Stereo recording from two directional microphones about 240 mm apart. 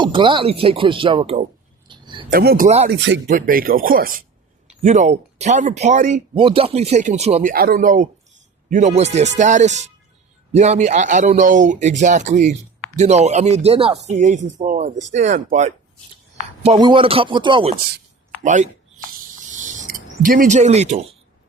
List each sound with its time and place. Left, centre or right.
0.0 s speech: centre
1.9 s a sound: centre
2.3 s a man's voice: right
2.6 s speech: right
2.9 s speech: right
3.2 s a man's voice: right
7.5 s a man's voice: right
16.6 s speech: centre
18.4 s snake: right